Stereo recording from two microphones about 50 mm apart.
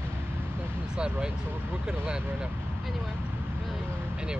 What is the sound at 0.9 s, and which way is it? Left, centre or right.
Speech, centre.